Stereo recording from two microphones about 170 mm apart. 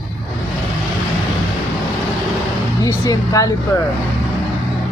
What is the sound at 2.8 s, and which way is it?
Speech, 20° left (ahead or behind).